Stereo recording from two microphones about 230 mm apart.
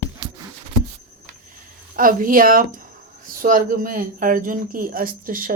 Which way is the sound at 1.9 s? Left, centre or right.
Right.